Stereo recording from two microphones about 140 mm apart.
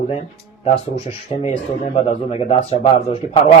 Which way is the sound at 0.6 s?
45° left (ahead or behind).